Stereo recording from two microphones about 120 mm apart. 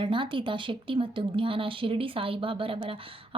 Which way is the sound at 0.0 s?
45° right (ahead or behind).